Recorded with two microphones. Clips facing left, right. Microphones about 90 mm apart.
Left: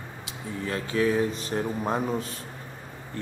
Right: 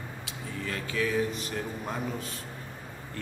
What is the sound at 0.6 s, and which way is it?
Speech, 30° left (ahead or behind).